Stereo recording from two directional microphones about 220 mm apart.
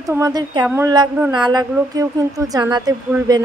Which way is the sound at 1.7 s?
15° right (ahead or behind).